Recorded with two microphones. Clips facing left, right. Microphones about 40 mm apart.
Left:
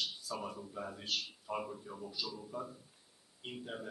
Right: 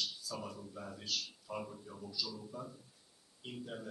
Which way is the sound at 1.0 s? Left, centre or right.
Left.